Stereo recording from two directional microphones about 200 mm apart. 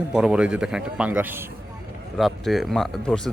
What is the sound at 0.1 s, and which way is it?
Speech, 5° right (ahead or behind).